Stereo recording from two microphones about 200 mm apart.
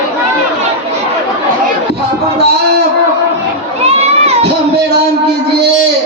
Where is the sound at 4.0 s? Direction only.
30° right (ahead or behind).